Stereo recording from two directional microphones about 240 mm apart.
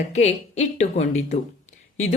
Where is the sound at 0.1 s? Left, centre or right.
Left.